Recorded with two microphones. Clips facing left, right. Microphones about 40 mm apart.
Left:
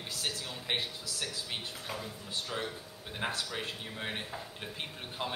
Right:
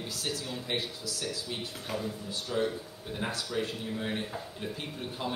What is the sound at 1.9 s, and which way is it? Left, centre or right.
Speech, centre.